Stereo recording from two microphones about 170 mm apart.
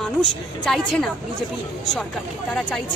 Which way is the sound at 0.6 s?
Centre (ahead or behind).